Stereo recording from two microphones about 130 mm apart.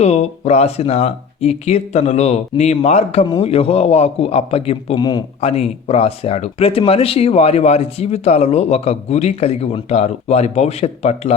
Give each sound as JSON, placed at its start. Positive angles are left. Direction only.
{"t": 0.0, "sound": "speech", "side_deg": 55}
{"t": 4.9, "sound": "a man's voice", "side_deg": 30}
{"t": 5.4, "sound": "speech", "side_deg": 55}